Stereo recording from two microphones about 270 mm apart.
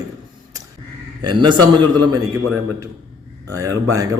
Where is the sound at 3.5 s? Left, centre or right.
Centre.